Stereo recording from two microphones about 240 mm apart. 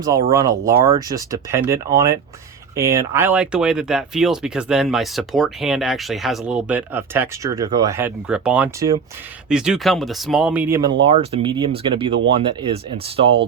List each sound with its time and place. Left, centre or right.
0.0 s speech: centre
11.0 s speech: right